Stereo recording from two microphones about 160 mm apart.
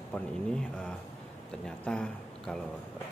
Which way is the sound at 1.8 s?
5° left (ahead or behind).